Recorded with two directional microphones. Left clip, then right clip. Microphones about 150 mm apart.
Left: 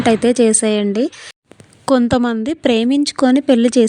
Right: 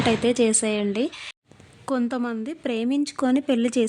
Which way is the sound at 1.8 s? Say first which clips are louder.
Left 12 dB; 45° left (ahead or behind).